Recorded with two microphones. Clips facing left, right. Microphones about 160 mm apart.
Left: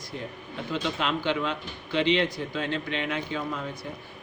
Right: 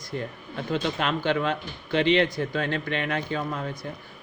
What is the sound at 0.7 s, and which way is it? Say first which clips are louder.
A man's voice: right 2 dB; 55° right (ahead or behind).